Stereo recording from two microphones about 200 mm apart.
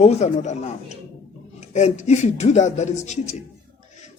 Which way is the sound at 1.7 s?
35° left (ahead or behind).